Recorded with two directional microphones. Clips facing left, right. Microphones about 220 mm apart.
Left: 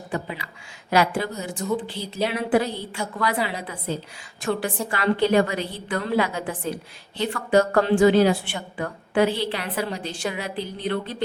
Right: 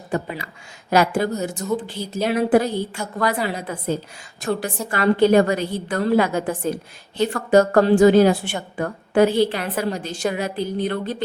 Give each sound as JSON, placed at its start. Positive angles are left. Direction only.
{"t": 0.1, "sound": "a woman's voice", "side_deg": -45}